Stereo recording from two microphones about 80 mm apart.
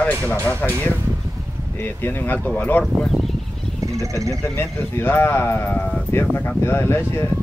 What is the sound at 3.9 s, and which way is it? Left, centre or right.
Speech, right.